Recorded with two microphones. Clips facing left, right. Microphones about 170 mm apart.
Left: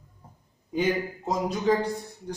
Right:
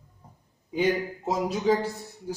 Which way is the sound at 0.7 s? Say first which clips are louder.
Right 1 dB; 5° right (ahead or behind).